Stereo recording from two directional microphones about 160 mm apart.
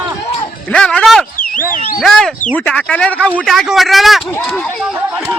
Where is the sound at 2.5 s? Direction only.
5° left (ahead or behind).